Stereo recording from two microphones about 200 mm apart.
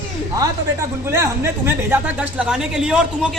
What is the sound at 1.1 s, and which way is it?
Speech, 10° right (ahead or behind).